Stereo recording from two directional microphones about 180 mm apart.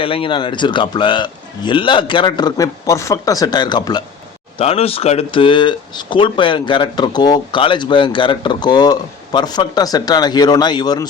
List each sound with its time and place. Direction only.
0.0 s speech: 30° left (ahead or behind)
4.5 s speech: 35° left (ahead or behind)